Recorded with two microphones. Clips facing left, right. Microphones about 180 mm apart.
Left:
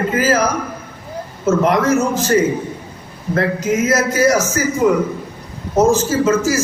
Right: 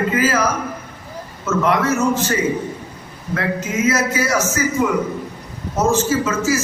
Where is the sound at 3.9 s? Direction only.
40° left (ahead or behind).